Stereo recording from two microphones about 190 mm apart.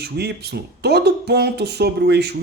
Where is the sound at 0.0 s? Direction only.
60° right (ahead or behind).